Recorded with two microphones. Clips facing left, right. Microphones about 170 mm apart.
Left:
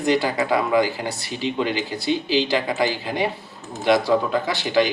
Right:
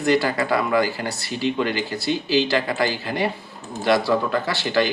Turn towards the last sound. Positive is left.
turn(degrees=15)  # may be behind; listen again after turning